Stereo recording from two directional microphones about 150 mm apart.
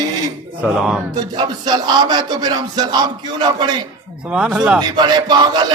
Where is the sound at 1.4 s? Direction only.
30° right (ahead or behind).